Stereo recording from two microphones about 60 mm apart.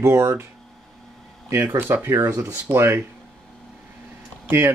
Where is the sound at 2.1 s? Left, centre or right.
Right.